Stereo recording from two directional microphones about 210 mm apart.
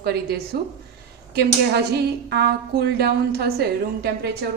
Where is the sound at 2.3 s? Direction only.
50° right (ahead or behind).